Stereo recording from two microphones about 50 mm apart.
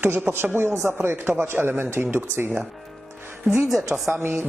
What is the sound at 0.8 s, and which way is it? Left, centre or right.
Speech, centre.